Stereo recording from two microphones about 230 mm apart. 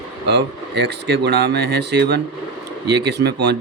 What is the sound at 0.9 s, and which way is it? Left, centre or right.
Speech, right.